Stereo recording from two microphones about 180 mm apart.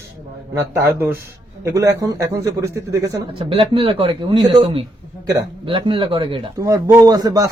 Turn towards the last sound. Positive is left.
turn(degrees=-20)  # may be behind; listen again after turning